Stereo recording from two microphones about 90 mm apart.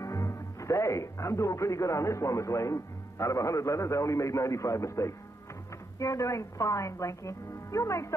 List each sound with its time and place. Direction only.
0.0 s a woman's voice: 35° left (ahead or behind)